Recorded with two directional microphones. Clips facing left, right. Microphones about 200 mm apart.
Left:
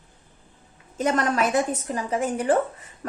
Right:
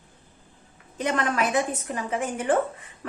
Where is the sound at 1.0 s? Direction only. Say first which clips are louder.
Left 3 dB; 40° left (ahead or behind).